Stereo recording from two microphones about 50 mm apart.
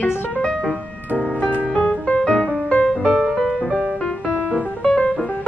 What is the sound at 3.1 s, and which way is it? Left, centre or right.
Music, centre.